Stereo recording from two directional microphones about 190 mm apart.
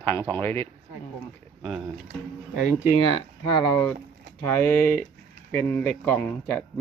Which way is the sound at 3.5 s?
20° left (ahead or behind).